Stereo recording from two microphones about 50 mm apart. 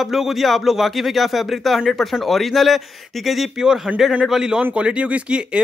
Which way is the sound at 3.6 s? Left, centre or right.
Centre.